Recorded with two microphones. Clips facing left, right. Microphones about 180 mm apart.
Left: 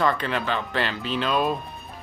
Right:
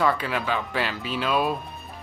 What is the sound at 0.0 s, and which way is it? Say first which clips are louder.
Speech: even; 5° right (ahead or behind).